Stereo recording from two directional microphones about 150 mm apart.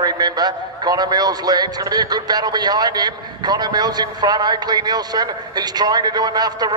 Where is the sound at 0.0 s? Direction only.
25° right (ahead or behind).